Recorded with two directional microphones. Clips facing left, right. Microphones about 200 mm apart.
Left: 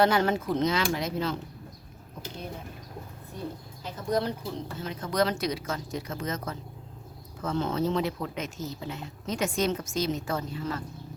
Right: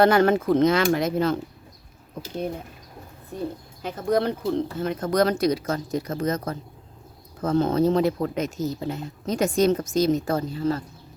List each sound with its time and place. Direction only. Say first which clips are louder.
0.0 s speech: right 6 dB; 55° right (ahead or behind)
3.8 s speech: right 6 dB; 55° right (ahead or behind); by 10.8 s 35° right (ahead or behind)